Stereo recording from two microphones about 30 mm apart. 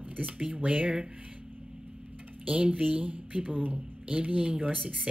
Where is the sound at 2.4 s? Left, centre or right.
Right.